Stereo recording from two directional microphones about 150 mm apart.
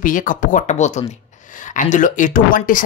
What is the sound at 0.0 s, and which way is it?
Speech, 60° left (ahead or behind).